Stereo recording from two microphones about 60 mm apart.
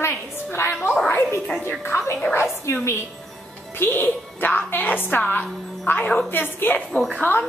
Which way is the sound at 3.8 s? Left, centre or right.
Left.